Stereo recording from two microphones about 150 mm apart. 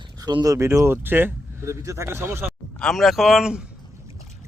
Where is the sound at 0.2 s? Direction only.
25° right (ahead or behind).